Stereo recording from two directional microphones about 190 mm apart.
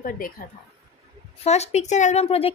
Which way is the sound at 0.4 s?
50° left (ahead or behind).